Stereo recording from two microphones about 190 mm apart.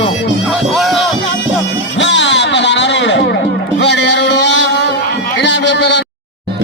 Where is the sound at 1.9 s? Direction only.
70° left (ahead or behind).